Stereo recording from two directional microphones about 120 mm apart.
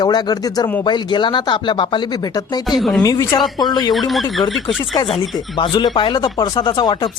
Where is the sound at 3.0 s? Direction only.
30° left (ahead or behind).